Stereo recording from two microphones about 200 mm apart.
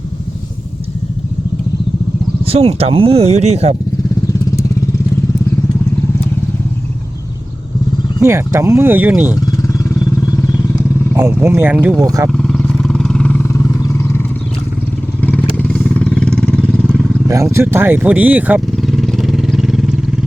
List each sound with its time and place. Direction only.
2.4 s speech: 30° right (ahead or behind)
8.2 s speech: 15° right (ahead or behind)
9.3 s vehicle: 15° left (ahead or behind)
11.1 s speech: 10° right (ahead or behind)
12.3 s vehicle: 5° left (ahead or behind)
17.2 s vehicle: 15° right (ahead or behind)